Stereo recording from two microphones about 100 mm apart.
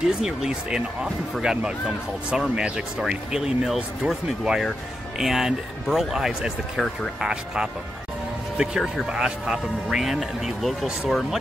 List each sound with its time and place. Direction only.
0.0 s speech: 5° right (ahead or behind)